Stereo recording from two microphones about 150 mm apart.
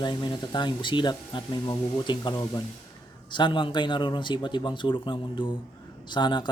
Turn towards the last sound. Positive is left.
turn(degrees=30)  # may be behind; listen again after turning